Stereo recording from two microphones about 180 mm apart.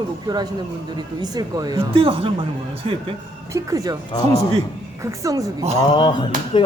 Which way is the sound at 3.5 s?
20° right (ahead or behind).